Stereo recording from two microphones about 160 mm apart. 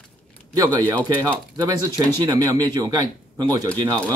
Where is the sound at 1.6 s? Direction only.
25° right (ahead or behind).